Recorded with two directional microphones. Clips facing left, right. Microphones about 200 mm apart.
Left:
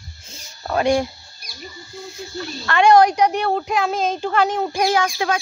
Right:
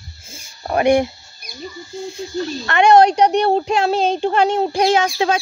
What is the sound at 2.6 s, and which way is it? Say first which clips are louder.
Speech: right 1 dB; 20° right (ahead or behind).